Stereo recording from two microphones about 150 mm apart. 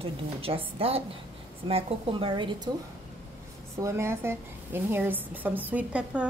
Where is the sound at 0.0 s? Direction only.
40° right (ahead or behind).